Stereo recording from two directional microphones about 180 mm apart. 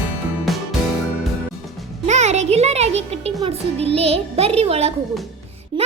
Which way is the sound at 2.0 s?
40° right (ahead or behind).